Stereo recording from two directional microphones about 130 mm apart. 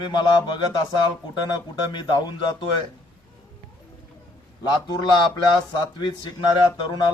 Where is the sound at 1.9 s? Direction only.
35° left (ahead or behind).